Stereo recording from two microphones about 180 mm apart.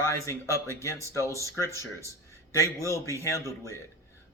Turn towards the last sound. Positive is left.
turn(degrees=15)  # may be behind; listen again after turning